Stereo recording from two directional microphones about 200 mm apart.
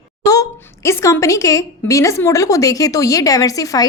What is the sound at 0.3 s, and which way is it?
A woman's voice, 15° left (ahead or behind).